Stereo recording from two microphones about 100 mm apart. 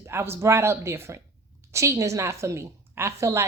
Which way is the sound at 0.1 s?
25° right (ahead or behind).